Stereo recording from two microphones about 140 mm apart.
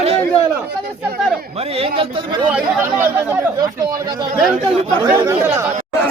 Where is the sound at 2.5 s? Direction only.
15° right (ahead or behind).